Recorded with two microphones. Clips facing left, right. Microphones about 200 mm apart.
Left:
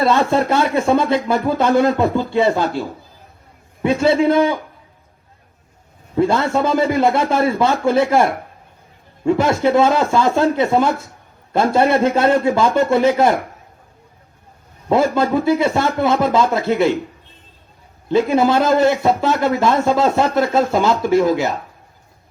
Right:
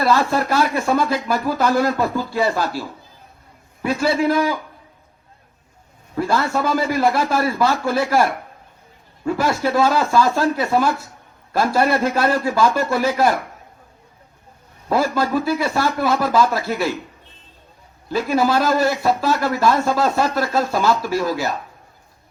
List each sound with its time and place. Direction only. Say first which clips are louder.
0.3 s speech: left 3 dB; 15° left (ahead or behind)
4.4 s speech: left 4 dB; 15° left (ahead or behind)
6.1 s speech: left 4 dB; 15° left (ahead or behind)
14.8 s speech: left 4 dB; 20° left (ahead or behind)
18.1 s speech: left 4 dB; 15° left (ahead or behind)